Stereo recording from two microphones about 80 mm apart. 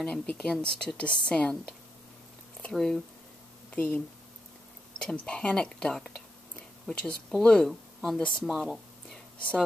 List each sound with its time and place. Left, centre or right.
0.0 s speech: centre
2.7 s speech: centre
3.7 s speech: left
5.0 s speech: centre
8.5 s speech: centre